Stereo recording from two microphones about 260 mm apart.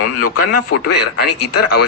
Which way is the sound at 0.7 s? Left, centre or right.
Left.